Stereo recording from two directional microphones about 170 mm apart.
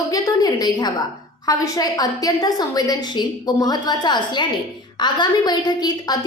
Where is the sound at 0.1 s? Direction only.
20° left (ahead or behind).